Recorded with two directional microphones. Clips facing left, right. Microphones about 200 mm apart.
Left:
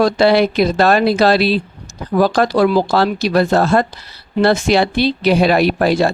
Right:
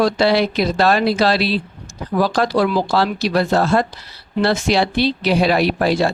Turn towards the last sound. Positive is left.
turn(degrees=50)  # may be behind; listen again after turning